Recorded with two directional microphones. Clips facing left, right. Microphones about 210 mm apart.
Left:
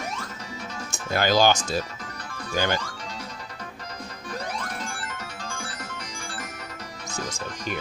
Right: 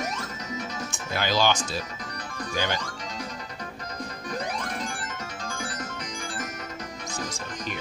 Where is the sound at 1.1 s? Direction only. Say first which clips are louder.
Left 4 dB; 45° left (ahead or behind).